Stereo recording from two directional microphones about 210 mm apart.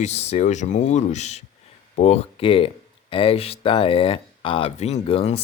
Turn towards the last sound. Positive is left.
turn(degrees=30)  # may be behind; listen again after turning